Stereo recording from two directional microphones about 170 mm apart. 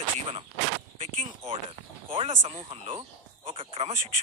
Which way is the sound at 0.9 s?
35° right (ahead or behind).